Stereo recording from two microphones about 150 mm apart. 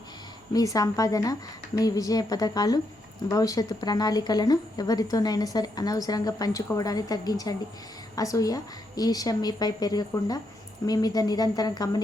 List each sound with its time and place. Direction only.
0.5 s speech: 25° left (ahead or behind)